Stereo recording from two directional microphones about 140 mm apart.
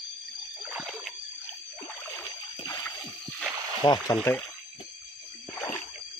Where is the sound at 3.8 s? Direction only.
30° left (ahead or behind).